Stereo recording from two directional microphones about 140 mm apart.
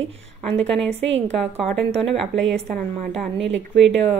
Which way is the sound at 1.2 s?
50° right (ahead or behind).